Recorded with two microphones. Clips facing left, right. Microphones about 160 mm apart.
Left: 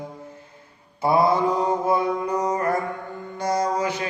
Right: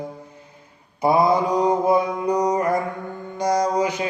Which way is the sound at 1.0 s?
20° right (ahead or behind).